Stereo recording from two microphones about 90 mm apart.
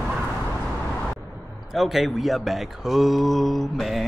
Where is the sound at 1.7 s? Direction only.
Centre (ahead or behind).